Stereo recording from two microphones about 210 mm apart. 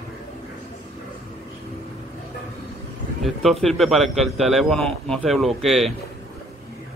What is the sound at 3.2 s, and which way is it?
Speech, centre (ahead or behind).